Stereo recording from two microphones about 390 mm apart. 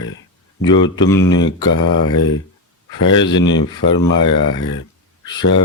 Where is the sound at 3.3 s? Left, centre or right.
Centre.